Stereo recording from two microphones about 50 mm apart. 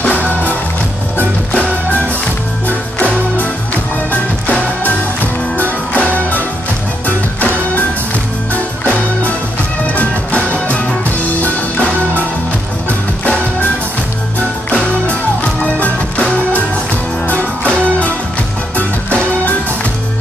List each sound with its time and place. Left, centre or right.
1.5 s music: left
4.1 s music: left
9.9 s music: left
13.2 s music: left
15.6 s music: left
17.6 s music: left